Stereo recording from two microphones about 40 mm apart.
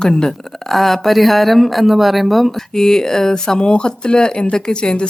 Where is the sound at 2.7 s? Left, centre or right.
Centre.